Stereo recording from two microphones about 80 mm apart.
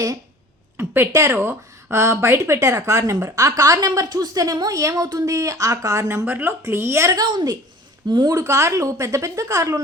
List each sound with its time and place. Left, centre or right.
0.8 s a woman's voice: right
6.2 s a woman's voice: right
7.1 s a woman's voice: right
8.3 s a woman's voice: right